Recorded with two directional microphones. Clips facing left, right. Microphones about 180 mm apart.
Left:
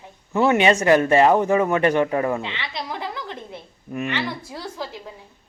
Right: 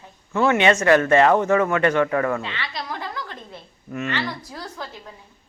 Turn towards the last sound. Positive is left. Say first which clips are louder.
# left 3 dB
turn(degrees=15)  # may be behind; listen again after turning